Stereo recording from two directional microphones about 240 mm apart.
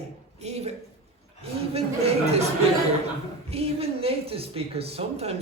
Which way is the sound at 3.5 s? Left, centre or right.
Right.